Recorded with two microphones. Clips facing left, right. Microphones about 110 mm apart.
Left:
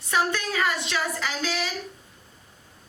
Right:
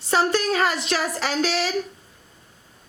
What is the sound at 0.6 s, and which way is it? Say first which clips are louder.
Speech: right 3 dB; 75° right (ahead or behind).